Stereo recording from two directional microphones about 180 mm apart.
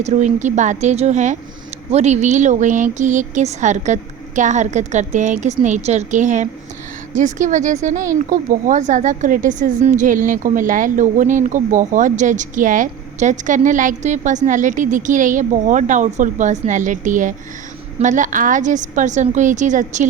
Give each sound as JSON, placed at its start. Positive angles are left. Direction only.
{"t": 0.0, "sound": "a woman's voice", "side_deg": -40}